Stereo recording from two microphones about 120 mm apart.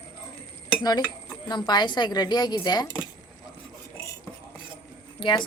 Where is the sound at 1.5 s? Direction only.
35° left (ahead or behind).